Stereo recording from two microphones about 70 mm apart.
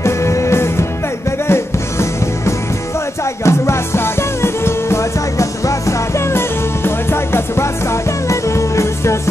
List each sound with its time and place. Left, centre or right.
0.0 s music: left